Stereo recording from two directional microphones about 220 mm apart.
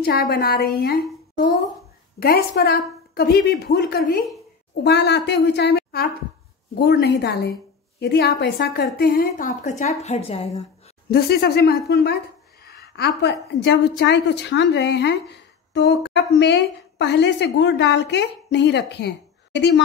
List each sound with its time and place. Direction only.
0.0 s a woman's voice: 45° left (ahead or behind)
2.1 s a woman's voice: 45° left (ahead or behind); by 10.6 s 30° left (ahead or behind)
11.1 s a woman's voice: 45° left (ahead or behind)